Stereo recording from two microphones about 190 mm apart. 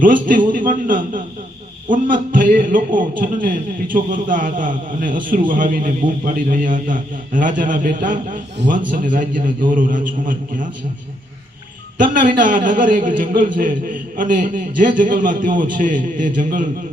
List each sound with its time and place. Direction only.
0.0 s a sound: 45° right (ahead or behind)
3.4 s a man's voice: 45° right (ahead or behind)
12.4 s a man's voice: 45° right (ahead or behind)